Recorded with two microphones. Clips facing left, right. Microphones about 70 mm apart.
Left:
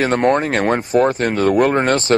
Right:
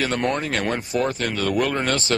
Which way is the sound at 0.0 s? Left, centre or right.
Left.